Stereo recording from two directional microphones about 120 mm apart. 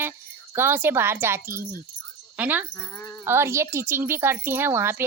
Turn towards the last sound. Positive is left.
turn(degrees=-20)  # may be behind; listen again after turning